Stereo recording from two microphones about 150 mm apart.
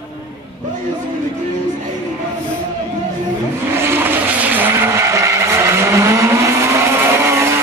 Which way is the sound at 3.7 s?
15° right (ahead or behind).